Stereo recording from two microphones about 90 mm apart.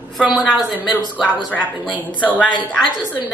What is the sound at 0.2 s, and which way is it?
Speech, 5° right (ahead or behind).